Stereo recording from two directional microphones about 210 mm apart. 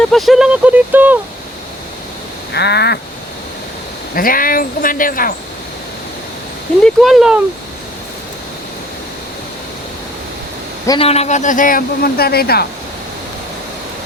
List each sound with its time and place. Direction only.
0.1 s speech: centre (ahead or behind)
2.5 s speech: 50° left (ahead or behind)
4.1 s speech: 40° left (ahead or behind)
6.8 s speech: centre (ahead or behind)
10.8 s a man's voice: 25° left (ahead or behind); by 12.6 s 50° left (ahead or behind)